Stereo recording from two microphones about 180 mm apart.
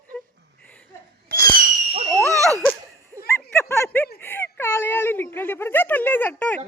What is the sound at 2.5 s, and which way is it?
Laughter, centre (ahead or behind).